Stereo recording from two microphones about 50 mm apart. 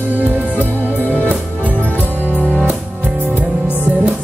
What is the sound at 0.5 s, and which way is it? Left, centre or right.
Music, left.